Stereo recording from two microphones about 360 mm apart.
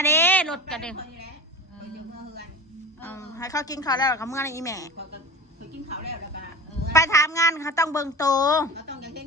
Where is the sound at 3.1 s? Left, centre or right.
Centre.